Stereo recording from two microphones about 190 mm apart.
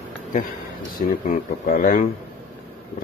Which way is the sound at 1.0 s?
40° left (ahead or behind).